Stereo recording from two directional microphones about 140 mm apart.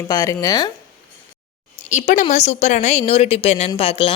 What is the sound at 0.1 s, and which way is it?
Speech, 25° left (ahead or behind).